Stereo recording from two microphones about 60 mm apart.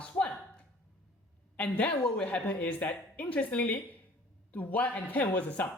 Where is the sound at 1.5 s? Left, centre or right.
Left.